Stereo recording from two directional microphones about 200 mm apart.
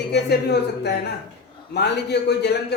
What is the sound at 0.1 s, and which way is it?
A man's voice, 55° left (ahead or behind).